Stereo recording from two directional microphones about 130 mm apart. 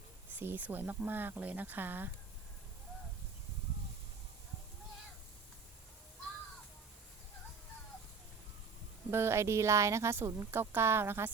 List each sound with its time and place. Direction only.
0.3 s speech: 15° right (ahead or behind)
9.0 s a woman's voice: 20° right (ahead or behind)